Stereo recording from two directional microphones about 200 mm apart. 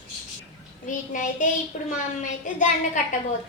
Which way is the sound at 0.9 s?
40° left (ahead or behind).